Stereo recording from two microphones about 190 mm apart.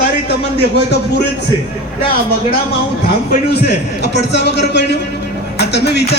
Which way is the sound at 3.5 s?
60° left (ahead or behind).